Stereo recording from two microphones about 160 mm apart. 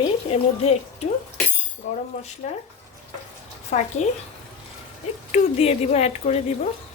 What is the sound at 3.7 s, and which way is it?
Speech, 45° left (ahead or behind).